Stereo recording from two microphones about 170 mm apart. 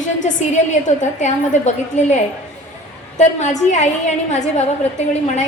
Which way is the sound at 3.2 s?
45° left (ahead or behind).